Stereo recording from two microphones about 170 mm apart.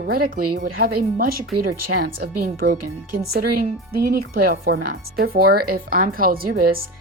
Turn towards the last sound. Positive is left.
turn(degrees=-60)  # may be behind; listen again after turning